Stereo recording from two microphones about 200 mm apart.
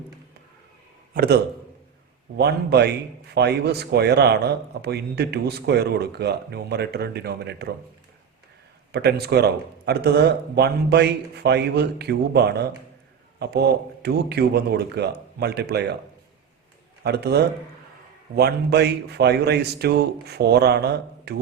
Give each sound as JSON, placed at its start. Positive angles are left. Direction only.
{"t": 1.1, "sound": "a man's voice", "side_deg": -50}
{"t": 2.4, "sound": "a man's voice", "side_deg": -55}
{"t": 8.9, "sound": "a man's voice", "side_deg": -55}
{"t": 17.0, "sound": "a man's voice", "side_deg": -55}